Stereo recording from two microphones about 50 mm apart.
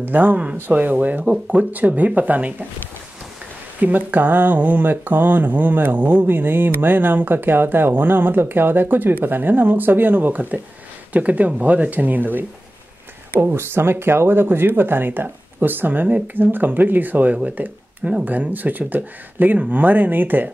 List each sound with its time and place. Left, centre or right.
0.0 s speech: right
3.8 s speech: right
13.4 s speech: right